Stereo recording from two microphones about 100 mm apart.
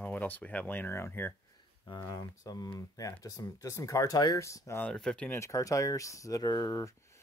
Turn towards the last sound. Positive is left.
turn(degrees=35)  # may be behind; listen again after turning